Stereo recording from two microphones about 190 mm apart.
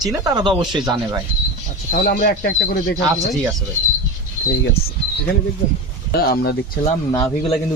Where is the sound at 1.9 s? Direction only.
45° left (ahead or behind).